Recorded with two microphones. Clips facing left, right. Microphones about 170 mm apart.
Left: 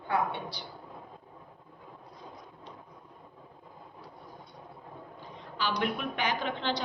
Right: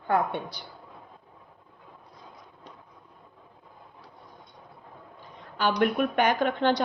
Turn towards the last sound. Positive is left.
turn(degrees=-50)  # may be behind; listen again after turning